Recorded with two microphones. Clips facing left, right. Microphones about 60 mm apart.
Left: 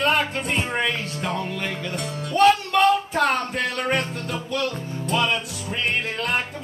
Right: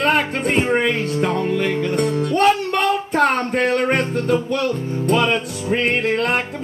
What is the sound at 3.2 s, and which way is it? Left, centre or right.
Music, right.